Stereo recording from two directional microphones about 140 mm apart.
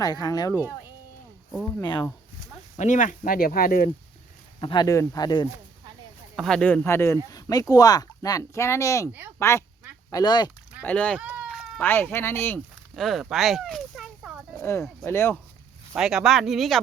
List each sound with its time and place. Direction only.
0.0 s speech: 30° left (ahead or behind)
1.8 s speech: 30° left (ahead or behind)
2.7 s speech: 60° left (ahead or behind); by 3.8 s 90° left
4.6 s speech: 30° left (ahead or behind)
6.3 s speech: centre (ahead or behind)
6.8 s speech: 20° left (ahead or behind)
10.8 s speech: 10° left (ahead or behind)
11.2 s sheep: 10° right (ahead or behind)
11.4 s cat: centre (ahead or behind)
11.8 s speech: 15° left (ahead or behind)
12.5 s speech: centre (ahead or behind)
13.3 s a sound: centre (ahead or behind)
14.6 s speech: 20° left (ahead or behind)
16.0 s speech: 5° right (ahead or behind)